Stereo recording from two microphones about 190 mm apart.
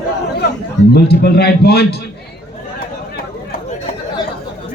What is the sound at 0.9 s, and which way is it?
A man's voice, 55° left (ahead or behind).